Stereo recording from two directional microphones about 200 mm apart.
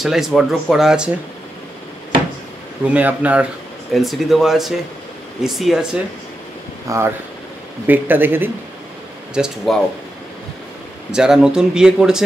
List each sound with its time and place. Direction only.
0.0 s speech: centre (ahead or behind)
2.9 s speech: 10° right (ahead or behind)
6.9 s speech: 15° right (ahead or behind)
11.1 s speech: 5° right (ahead or behind)